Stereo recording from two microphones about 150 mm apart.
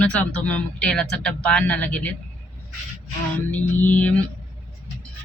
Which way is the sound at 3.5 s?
10° left (ahead or behind).